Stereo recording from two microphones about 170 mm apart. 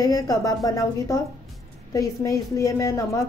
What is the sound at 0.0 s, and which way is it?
A woman's voice, 20° left (ahead or behind).